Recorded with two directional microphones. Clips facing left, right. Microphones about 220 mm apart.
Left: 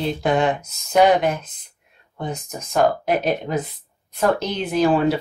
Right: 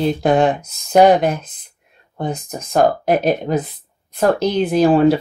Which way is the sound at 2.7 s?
40° right (ahead or behind).